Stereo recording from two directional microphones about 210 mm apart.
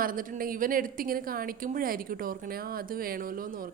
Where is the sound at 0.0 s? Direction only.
40° right (ahead or behind).